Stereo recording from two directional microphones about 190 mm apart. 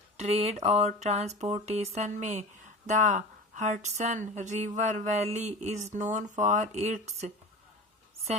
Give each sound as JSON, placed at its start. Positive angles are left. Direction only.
{"t": 0.2, "sound": "a woman's voice", "side_deg": -35}